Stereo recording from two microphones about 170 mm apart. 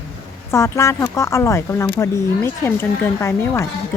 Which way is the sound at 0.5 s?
15° left (ahead or behind).